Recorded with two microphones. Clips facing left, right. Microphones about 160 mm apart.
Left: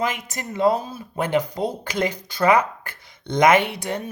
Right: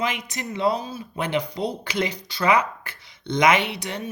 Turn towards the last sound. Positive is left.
turn(degrees=50)  # may be behind; listen again after turning